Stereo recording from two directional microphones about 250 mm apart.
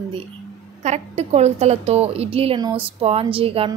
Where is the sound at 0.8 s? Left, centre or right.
Right.